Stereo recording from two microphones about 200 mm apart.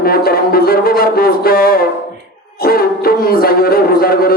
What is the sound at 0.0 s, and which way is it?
A man's voice, 50° left (ahead or behind).